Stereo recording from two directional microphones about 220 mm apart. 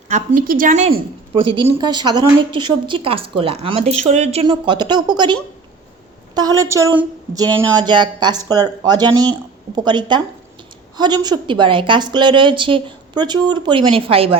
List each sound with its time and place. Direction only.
0.1 s a woman's voice: 40° right (ahead or behind)
1.4 s a woman's voice: 20° right (ahead or behind)